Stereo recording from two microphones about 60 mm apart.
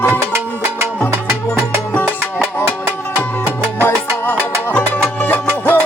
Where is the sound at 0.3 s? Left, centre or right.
Right.